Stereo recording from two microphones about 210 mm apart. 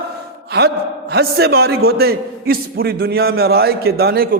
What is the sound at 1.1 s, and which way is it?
A man's voice, 50° right (ahead or behind).